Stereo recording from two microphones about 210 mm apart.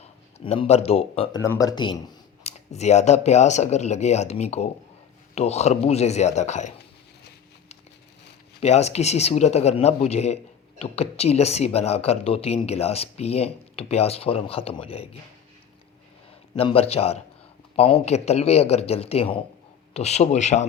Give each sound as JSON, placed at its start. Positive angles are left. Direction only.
{"t": 0.0, "sound": "speech", "side_deg": 30}
{"t": 1.4, "sound": "speech", "side_deg": 15}
{"t": 8.6, "sound": "speech", "side_deg": 30}
{"t": 16.6, "sound": "speech", "side_deg": 25}